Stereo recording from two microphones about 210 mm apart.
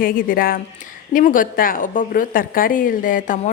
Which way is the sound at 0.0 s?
40° left (ahead or behind).